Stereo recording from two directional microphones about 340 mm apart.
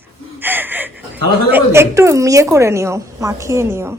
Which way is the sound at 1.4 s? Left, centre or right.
Centre.